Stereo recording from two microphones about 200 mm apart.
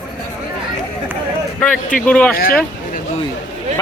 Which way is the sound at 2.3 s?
45° left (ahead or behind).